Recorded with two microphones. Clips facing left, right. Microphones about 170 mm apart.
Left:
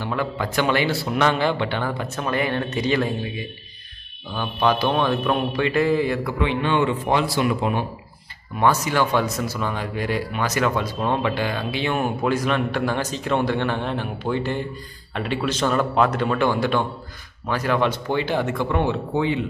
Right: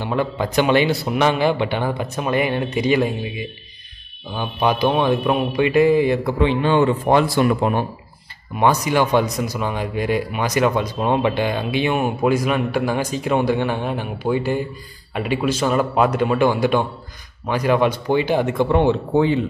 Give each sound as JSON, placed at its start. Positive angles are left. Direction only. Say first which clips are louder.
{"t": 0.0, "sound": "speech", "louder": "right 4 dB", "side_deg": -20}
{"t": 6.4, "sound": "a man's voice", "louder": "right 4 dB", "side_deg": -35}
{"t": 8.5, "sound": "speech", "louder": "right 3 dB", "side_deg": -15}
{"t": 18.6, "sound": "speech", "louder": "right 6 dB", "side_deg": -25}